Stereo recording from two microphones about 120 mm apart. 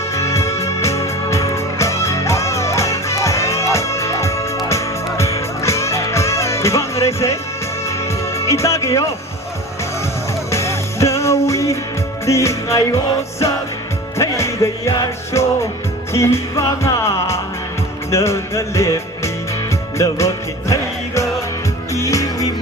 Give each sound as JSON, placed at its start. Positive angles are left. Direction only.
{"t": 0.1, "sound": "music", "side_deg": 25}
{"t": 10.5, "sound": "music", "side_deg": 25}
{"t": 14.2, "sound": "music", "side_deg": 25}
{"t": 21.9, "sound": "music", "side_deg": 25}